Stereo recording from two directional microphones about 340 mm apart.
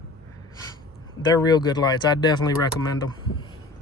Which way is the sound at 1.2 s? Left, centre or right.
Centre.